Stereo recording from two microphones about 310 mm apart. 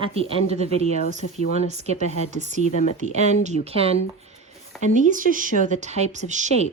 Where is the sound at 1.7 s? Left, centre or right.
Right.